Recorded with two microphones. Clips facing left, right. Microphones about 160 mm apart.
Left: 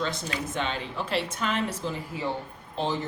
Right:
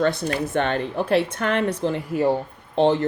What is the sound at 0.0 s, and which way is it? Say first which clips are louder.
A woman's voice: right 9 dB; 60° right (ahead or behind).